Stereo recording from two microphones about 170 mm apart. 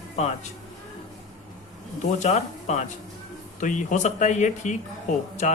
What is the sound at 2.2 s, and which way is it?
Speech, 45° left (ahead or behind).